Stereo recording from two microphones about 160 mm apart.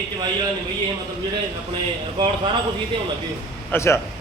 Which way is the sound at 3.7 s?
15° left (ahead or behind).